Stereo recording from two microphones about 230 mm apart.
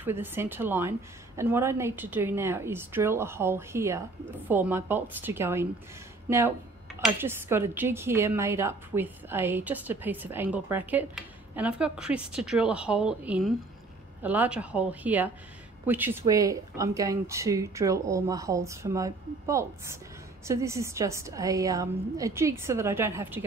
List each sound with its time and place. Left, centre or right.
0.0 s speech: centre